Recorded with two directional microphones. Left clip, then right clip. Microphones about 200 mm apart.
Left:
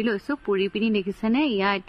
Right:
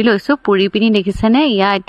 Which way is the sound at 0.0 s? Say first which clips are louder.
Right 13 dB; 45° right (ahead or behind).